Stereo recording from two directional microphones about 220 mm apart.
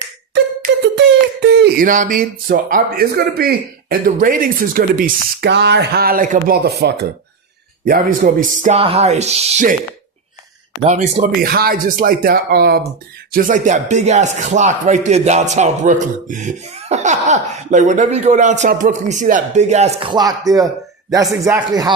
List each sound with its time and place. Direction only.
0.3 s a sound: 50° right (ahead or behind)
7.9 s speech: 40° right (ahead or behind)
10.8 s speech: 30° right (ahead or behind); by 21.9 s 15° right (ahead or behind)